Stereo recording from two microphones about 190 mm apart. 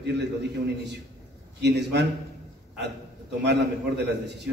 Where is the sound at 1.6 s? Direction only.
65° right (ahead or behind).